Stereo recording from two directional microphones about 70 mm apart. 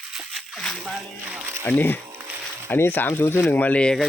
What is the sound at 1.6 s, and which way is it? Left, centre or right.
Speech, left.